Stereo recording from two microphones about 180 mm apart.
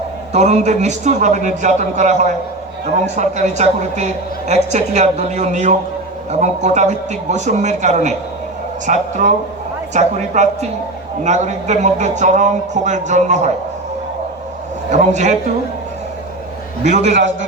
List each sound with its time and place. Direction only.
0.3 s a woman's voice: 40° right (ahead or behind)
14.8 s a woman's voice: 40° right (ahead or behind)
16.8 s a woman's voice: 40° right (ahead or behind)